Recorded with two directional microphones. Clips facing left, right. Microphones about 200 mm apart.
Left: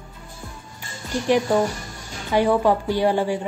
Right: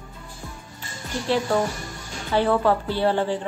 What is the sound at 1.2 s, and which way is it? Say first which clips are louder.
Music: left 3 dB; 15° left (ahead or behind).